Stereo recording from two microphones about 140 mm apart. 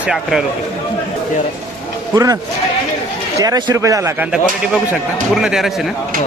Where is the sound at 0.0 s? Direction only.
5° right (ahead or behind).